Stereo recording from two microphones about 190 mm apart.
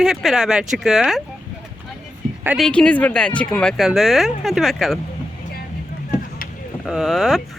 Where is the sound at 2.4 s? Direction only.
10° right (ahead or behind).